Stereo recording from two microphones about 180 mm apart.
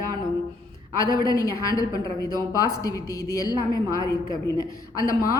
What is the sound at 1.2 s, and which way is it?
A woman's voice, 20° left (ahead or behind).